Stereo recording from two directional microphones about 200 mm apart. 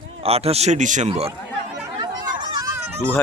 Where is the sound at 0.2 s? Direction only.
30° right (ahead or behind).